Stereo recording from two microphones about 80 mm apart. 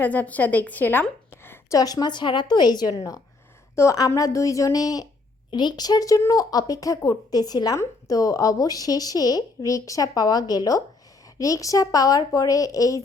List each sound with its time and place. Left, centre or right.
0.0 s a woman's voice: centre
1.7 s a woman's voice: left
2.9 s speech: left
5.5 s speech: left